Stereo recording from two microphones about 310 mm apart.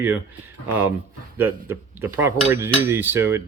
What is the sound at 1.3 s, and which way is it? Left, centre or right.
Speech, centre.